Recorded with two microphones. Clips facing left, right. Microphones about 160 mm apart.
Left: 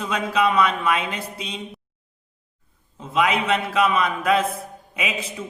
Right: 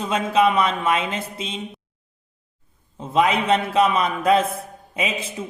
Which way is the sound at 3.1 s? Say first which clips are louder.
Right 2 dB; 30° right (ahead or behind).